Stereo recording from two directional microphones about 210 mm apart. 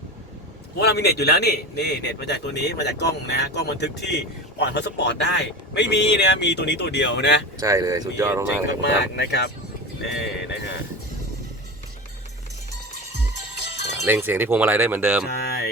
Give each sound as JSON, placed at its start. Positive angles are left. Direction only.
{"t": 0.8, "sound": "a man's voice", "side_deg": 50}
{"t": 7.6, "sound": "speech", "side_deg": -15}
{"t": 8.8, "sound": "a man's voice", "side_deg": 55}
{"t": 14.0, "sound": "speech", "side_deg": -10}
{"t": 15.4, "sound": "a sound", "side_deg": 45}